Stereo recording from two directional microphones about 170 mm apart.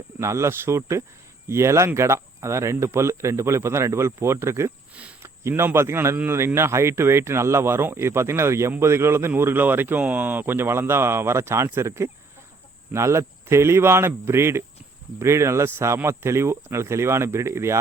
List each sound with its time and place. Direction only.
0.2 s speech: 15° right (ahead or behind)